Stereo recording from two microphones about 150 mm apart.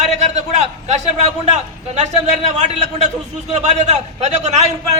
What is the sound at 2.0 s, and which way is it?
A man's voice, 50° right (ahead or behind).